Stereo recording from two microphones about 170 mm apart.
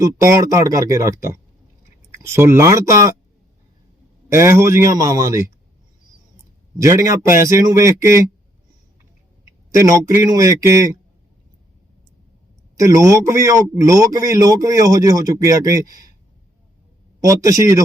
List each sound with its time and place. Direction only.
0.0 s a man's voice: 20° right (ahead or behind)
4.3 s a man's voice: 15° right (ahead or behind)
6.7 s a man's voice: 20° right (ahead or behind)
9.7 s a man's voice: 15° right (ahead or behind)
12.8 s a man's voice: 20° right (ahead or behind)
17.2 s a man's voice: 20° right (ahead or behind)